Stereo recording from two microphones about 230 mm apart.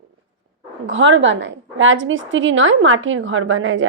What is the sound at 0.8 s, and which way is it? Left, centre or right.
A woman's voice, right.